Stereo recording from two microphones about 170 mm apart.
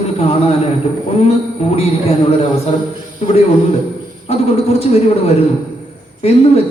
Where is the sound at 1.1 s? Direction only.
40° left (ahead or behind).